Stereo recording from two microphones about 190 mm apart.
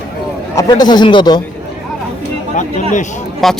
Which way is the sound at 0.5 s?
20° left (ahead or behind).